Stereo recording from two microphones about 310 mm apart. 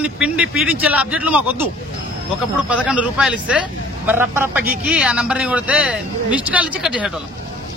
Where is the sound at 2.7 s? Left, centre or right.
Centre.